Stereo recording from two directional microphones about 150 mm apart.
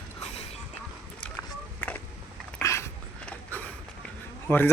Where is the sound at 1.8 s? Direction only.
10° left (ahead or behind).